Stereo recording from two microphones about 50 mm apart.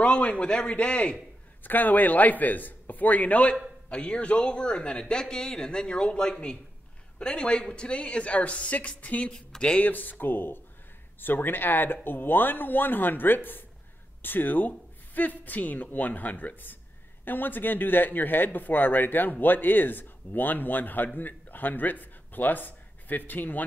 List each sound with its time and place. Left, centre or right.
0.0 s speech: left
1.6 s speech: left
9.3 s speech: centre
9.8 s speech: left